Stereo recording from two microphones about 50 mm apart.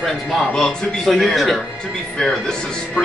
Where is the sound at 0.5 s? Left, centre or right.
Centre.